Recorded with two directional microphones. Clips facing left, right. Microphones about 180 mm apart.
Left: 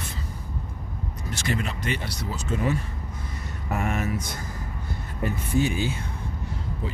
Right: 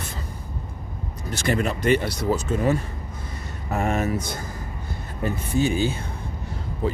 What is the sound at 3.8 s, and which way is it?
Speech, 35° right (ahead or behind).